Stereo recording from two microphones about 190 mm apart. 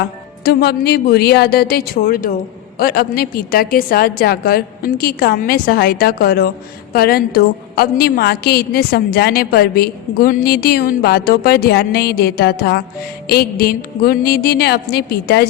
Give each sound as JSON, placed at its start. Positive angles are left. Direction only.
{"t": 0.0, "sound": "a woman's voice", "side_deg": 55}